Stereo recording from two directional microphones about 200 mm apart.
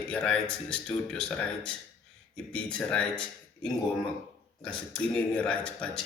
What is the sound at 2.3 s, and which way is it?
Speech, 5° left (ahead or behind).